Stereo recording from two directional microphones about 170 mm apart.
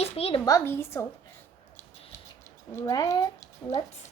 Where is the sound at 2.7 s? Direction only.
20° left (ahead or behind).